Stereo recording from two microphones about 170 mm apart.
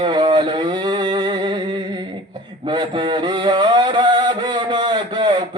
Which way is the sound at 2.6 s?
25° right (ahead or behind).